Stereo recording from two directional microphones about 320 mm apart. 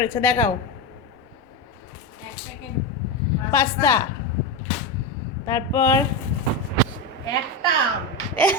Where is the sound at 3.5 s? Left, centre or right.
Centre.